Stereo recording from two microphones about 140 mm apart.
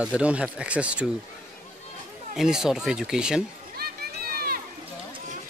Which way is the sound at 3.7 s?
90° right.